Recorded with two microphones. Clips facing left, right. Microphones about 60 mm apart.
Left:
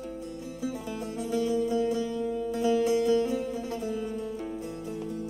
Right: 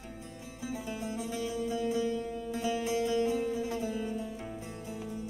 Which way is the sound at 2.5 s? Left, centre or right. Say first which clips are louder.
Left 7 dB; right.